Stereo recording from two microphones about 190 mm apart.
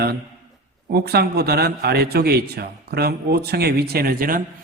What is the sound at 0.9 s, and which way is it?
A man's voice, 55° right (ahead or behind).